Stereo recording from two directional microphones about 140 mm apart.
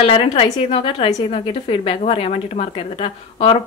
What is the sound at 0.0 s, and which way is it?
A woman's voice, 40° left (ahead or behind).